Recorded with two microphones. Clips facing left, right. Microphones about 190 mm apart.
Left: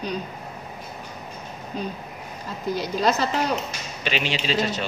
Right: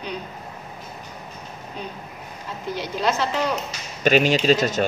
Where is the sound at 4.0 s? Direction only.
45° right (ahead or behind).